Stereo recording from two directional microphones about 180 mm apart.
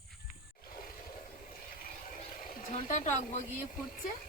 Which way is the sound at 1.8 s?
50° left (ahead or behind).